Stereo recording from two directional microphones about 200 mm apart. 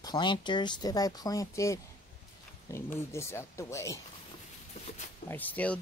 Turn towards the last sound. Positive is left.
turn(degrees=10)  # may be behind; listen again after turning